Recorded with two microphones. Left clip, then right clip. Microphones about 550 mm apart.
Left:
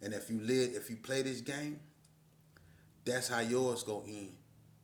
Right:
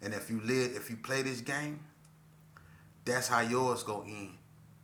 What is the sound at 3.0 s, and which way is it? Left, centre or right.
A man's voice, left.